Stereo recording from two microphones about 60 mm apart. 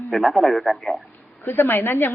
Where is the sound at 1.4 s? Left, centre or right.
Left.